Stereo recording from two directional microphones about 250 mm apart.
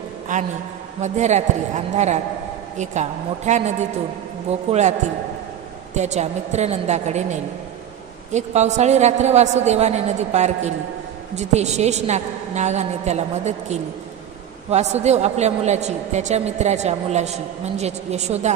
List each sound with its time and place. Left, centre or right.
0.3 s a man's voice: right
5.9 s a woman's voice: right